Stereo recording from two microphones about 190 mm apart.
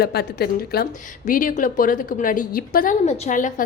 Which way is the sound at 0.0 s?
55° left (ahead or behind).